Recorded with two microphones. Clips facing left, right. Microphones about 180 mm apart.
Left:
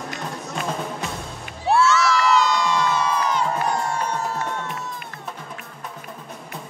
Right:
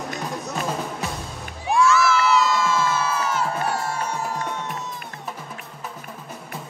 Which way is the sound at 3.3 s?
5° right (ahead or behind).